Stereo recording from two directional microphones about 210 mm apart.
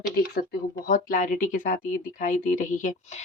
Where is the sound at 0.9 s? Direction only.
40° left (ahead or behind).